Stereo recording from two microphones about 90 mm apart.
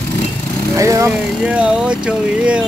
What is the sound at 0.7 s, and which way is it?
Speech, 35° right (ahead or behind).